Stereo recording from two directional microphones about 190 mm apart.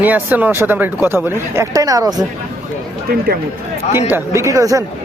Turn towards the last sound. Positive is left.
turn(degrees=-15)  # may be behind; listen again after turning